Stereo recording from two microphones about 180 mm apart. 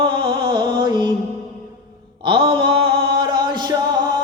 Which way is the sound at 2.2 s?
30° right (ahead or behind).